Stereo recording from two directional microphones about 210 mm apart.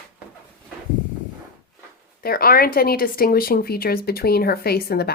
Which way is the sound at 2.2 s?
45° left (ahead or behind).